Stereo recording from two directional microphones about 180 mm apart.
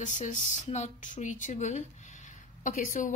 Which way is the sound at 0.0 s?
40° left (ahead or behind).